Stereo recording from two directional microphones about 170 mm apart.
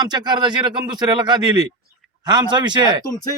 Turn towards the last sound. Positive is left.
turn(degrees=-25)  # may be behind; listen again after turning